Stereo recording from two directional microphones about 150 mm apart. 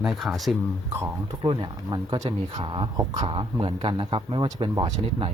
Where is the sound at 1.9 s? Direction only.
25° right (ahead or behind).